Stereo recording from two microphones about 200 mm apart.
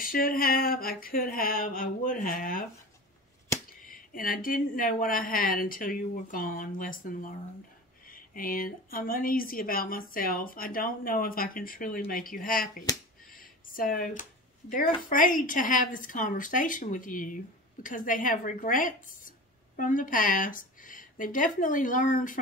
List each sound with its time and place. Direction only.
0.0 s a woman's voice: 45° left (ahead or behind)
3.8 s a woman's voice: 45° left (ahead or behind)
13.3 s a sound: 45° left (ahead or behind)
14.7 s a woman's voice: 45° left (ahead or behind)